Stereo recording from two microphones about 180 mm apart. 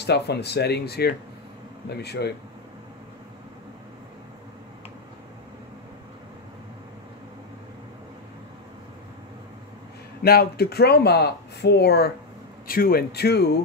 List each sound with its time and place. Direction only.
0.0 s speech: 65° left (ahead or behind)
10.2 s speech: 60° left (ahead or behind)
12.6 s speech: 55° left (ahead or behind)